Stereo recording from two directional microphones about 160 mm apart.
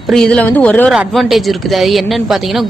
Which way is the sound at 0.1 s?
5° left (ahead or behind).